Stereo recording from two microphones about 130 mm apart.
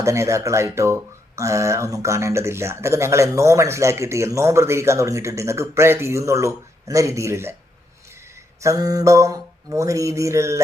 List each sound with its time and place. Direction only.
0.0 s speech: 20° right (ahead or behind)
8.6 s speech: 30° right (ahead or behind)